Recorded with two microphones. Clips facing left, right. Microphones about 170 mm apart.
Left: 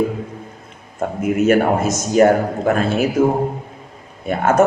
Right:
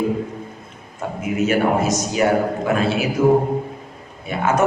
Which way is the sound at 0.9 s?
50° left (ahead or behind).